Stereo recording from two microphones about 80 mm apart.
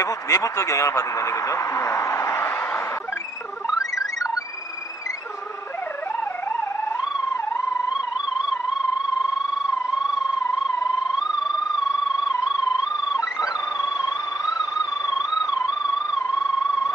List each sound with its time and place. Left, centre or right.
0.0 s speech: left
3.6 s music: centre
13.1 s theremin: left